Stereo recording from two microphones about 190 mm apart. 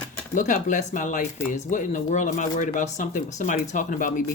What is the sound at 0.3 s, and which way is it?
Speech, 40° left (ahead or behind).